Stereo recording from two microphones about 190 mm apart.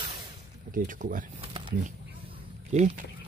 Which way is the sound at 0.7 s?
45° right (ahead or behind).